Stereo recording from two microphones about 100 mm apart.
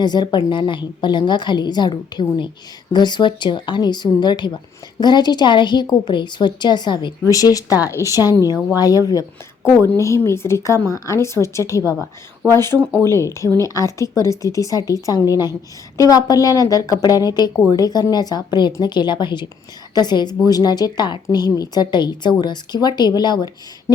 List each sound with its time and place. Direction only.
0.0 s a woman's voice: 45° left (ahead or behind)
7.3 s a woman's voice: 35° left (ahead or behind)